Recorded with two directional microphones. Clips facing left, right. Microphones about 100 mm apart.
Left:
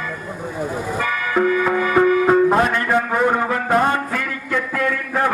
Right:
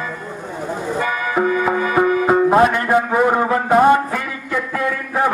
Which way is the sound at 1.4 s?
20° right (ahead or behind).